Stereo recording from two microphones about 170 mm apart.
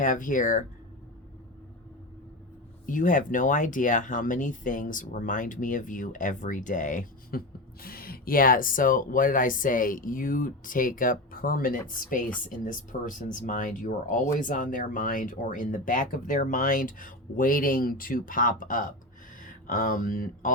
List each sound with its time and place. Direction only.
0.0 s speech: 50° left (ahead or behind)
2.8 s speech: 50° left (ahead or behind)